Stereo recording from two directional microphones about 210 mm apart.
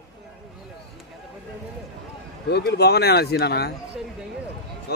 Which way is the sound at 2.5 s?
50° left (ahead or behind).